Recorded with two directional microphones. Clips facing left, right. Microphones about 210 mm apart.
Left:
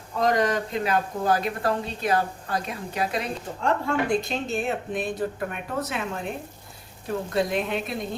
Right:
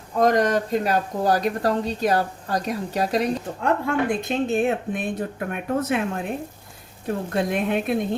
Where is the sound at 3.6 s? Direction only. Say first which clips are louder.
Right 2 dB; 55° right (ahead or behind).